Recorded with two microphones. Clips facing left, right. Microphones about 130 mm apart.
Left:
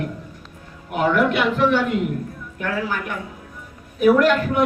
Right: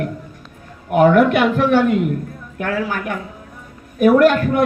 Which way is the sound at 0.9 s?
50° right (ahead or behind).